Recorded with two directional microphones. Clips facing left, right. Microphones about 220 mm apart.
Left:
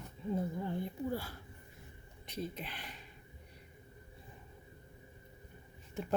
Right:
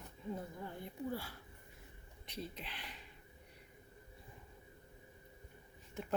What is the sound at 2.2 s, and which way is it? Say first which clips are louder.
Speech: left 5 dB; 50° left (ahead or behind).